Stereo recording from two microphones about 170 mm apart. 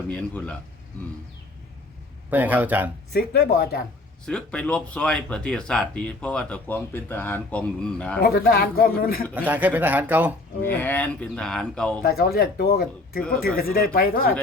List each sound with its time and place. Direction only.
0.1 s speech: 5° left (ahead or behind)
2.3 s speech: 10° right (ahead or behind)
3.1 s speech: 65° left (ahead or behind)
4.3 s speech: 5° left (ahead or behind)
8.2 s speech: 65° left (ahead or behind)
9.3 s speech: 10° right (ahead or behind)
10.6 s speech: 10° left (ahead or behind)
12.0 s speech: 65° left (ahead or behind)